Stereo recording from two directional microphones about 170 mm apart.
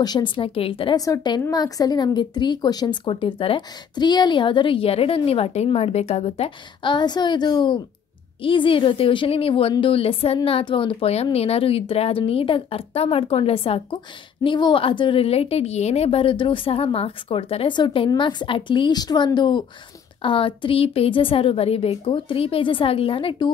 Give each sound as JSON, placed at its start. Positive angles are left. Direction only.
{"t": 0.0, "sound": "a woman's voice", "side_deg": 25}